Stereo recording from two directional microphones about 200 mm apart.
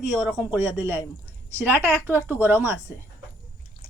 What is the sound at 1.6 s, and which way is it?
A woman's voice, 10° right (ahead or behind).